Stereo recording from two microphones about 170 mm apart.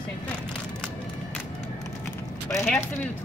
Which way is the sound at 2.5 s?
15° left (ahead or behind).